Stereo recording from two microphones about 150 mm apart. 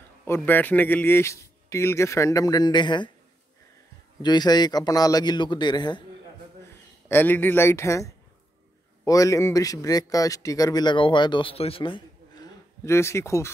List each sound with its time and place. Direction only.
0.2 s a man's voice: 15° left (ahead or behind); by 3.1 s 30° left (ahead or behind)
4.2 s a man's voice: 30° left (ahead or behind)
7.1 s a man's voice: 15° left (ahead or behind)